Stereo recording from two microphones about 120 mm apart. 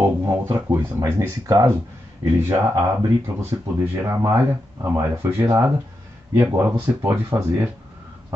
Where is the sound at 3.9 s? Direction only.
20° right (ahead or behind).